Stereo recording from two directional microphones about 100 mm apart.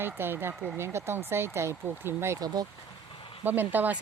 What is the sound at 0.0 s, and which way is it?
Speech, 20° right (ahead or behind).